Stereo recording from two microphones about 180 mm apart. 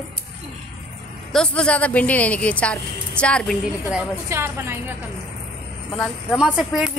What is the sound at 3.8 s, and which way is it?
Speech, 10° right (ahead or behind).